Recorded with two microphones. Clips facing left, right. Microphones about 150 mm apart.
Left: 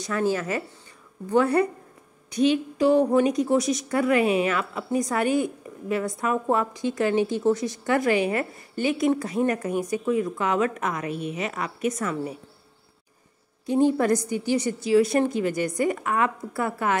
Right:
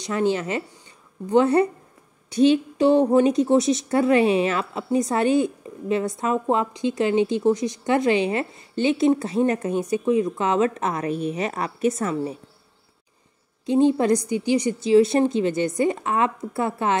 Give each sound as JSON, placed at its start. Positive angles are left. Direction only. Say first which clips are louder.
{"t": 0.0, "sound": "a woman's voice", "louder": "right 2 dB", "side_deg": -20}
{"t": 13.7, "sound": "a woman's voice", "louder": "right 2 dB", "side_deg": -20}